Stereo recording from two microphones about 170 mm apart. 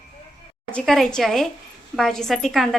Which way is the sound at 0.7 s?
Centre (ahead or behind).